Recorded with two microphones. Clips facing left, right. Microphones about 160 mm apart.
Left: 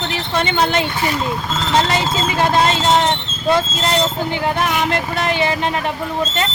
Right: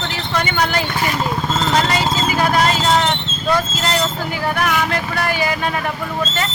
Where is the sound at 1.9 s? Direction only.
25° left (ahead or behind).